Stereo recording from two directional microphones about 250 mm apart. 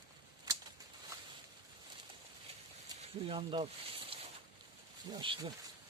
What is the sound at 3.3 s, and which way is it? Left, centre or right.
Speech, centre.